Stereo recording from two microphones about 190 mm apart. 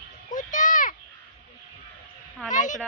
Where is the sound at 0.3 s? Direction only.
40° left (ahead or behind).